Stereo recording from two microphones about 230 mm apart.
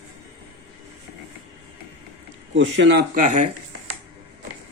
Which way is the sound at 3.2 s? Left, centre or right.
Right.